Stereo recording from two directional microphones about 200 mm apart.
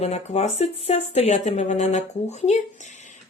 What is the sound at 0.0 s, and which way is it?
Speech, 30° left (ahead or behind).